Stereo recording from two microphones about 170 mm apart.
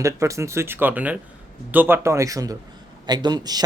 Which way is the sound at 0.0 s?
15° right (ahead or behind).